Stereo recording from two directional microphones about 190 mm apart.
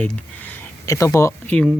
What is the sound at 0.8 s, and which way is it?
Speech, 15° left (ahead or behind).